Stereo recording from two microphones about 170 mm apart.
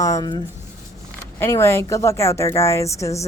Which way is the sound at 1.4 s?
15° left (ahead or behind).